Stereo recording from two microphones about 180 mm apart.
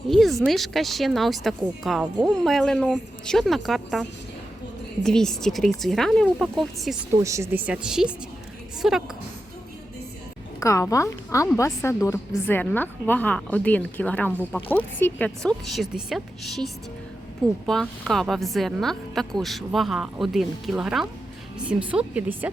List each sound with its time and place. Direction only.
0.1 s a woman's voice: centre (ahead or behind)
5.0 s a woman's voice: 5° left (ahead or behind)
7.1 s a woman's voice: 15° right (ahead or behind)
10.6 s a woman's voice: 15° left (ahead or behind); by 22.4 s 10° right (ahead or behind)